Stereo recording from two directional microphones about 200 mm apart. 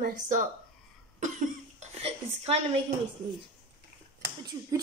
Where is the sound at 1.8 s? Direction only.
35° right (ahead or behind).